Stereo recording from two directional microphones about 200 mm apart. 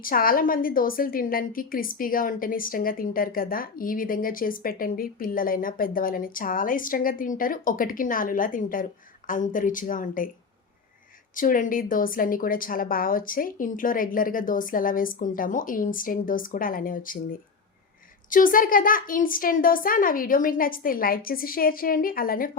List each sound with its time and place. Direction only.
0.0 s a woman's voice: 45° left (ahead or behind)
11.3 s a woman's voice: 40° left (ahead or behind)
18.3 s a woman's voice: 45° left (ahead or behind)